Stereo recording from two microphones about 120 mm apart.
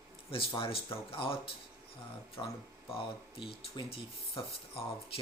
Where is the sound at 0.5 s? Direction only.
50° left (ahead or behind).